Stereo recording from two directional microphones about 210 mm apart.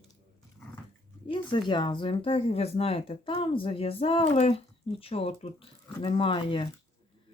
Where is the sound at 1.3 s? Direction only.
25° left (ahead or behind).